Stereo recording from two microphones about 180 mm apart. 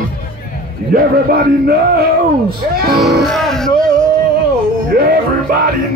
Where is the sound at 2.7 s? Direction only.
60° right (ahead or behind).